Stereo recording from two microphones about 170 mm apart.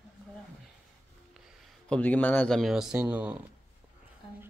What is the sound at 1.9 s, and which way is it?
Speech, 10° left (ahead or behind).